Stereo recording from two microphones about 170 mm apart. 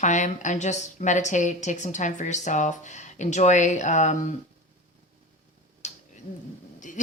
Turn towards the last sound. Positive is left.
turn(degrees=45)  # may be behind; listen again after turning